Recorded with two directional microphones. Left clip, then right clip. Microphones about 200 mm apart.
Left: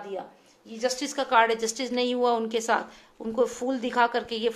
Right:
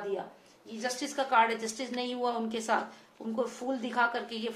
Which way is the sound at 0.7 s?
45° left (ahead or behind).